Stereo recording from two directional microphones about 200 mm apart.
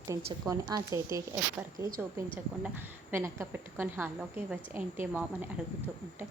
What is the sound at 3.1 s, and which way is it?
A woman's voice, 10° right (ahead or behind).